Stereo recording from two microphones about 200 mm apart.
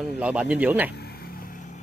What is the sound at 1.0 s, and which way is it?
Vehicle, 50° left (ahead or behind).